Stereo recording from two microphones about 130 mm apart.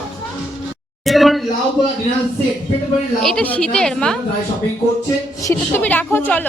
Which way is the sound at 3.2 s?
5° left (ahead or behind).